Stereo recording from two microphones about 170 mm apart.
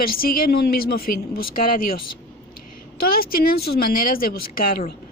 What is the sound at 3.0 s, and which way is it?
Speech, 60° left (ahead or behind).